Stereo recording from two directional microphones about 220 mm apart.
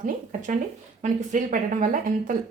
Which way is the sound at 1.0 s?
35° right (ahead or behind).